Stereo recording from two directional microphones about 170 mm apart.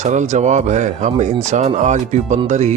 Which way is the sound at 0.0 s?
45° right (ahead or behind).